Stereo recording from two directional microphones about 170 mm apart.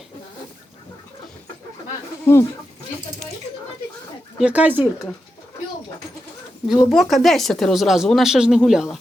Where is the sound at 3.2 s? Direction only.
5° left (ahead or behind).